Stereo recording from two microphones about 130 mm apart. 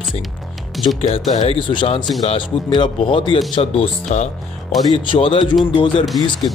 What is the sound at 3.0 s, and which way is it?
Speech, 40° left (ahead or behind).